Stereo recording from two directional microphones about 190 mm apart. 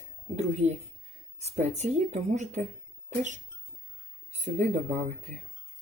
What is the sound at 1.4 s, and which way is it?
Speech, 35° right (ahead or behind).